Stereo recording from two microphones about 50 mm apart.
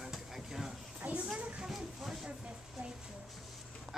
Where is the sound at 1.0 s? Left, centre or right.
Right.